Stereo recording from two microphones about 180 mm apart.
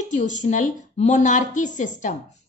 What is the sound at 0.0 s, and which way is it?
A woman's voice, 40° left (ahead or behind).